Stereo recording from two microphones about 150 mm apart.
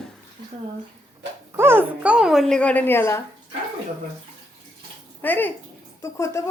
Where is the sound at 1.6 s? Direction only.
15° right (ahead or behind); by 3.2 s 15° left (ahead or behind).